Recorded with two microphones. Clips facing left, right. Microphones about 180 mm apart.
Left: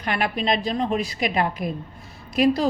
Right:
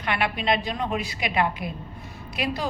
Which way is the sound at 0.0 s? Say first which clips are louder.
Left 2 dB; 40° left (ahead or behind).